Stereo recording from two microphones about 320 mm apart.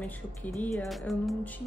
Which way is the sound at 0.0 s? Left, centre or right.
Centre.